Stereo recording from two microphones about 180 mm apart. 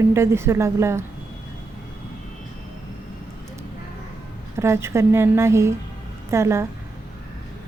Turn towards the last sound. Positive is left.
turn(degrees=-15)  # may be behind; listen again after turning